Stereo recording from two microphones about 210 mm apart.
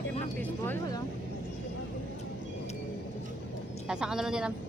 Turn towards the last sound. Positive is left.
turn(degrees=-5)  # may be behind; listen again after turning